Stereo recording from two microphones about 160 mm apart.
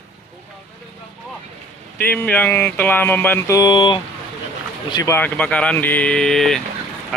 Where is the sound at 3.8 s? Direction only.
30° left (ahead or behind).